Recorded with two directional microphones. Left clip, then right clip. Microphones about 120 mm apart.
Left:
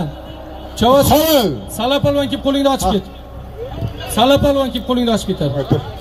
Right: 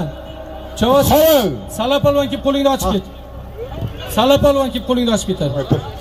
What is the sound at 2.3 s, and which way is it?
Speech, 25° right (ahead or behind).